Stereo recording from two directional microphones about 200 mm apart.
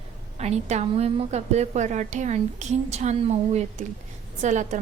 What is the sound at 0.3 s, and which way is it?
A woman's voice, 35° right (ahead or behind).